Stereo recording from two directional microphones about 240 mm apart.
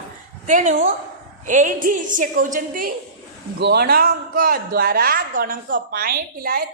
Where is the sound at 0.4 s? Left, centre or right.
Right.